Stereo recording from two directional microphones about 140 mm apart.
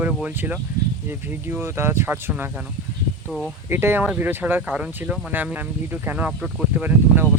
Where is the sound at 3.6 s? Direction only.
15° right (ahead or behind).